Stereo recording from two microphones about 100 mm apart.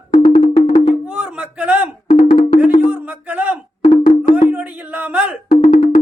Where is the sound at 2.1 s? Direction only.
90° left.